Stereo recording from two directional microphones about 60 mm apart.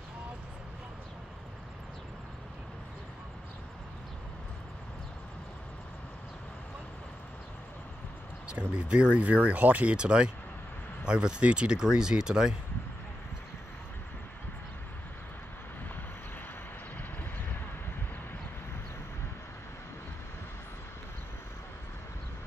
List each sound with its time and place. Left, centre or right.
8.5 s speech: centre